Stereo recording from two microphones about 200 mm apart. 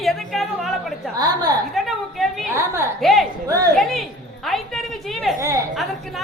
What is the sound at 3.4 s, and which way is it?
Speech, 15° right (ahead or behind).